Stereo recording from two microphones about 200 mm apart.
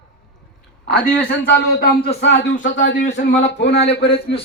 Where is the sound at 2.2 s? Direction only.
60° left (ahead or behind).